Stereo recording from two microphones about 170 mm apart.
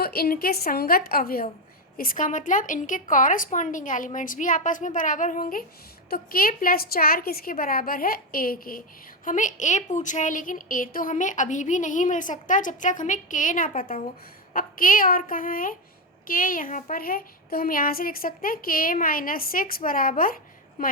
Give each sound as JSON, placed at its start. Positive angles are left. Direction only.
{"t": 0.0, "sound": "a woman's voice", "side_deg": 65}